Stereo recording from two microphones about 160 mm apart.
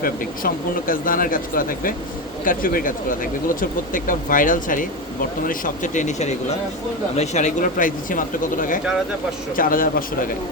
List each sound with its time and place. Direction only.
0.0 s speech: 60° left (ahead or behind)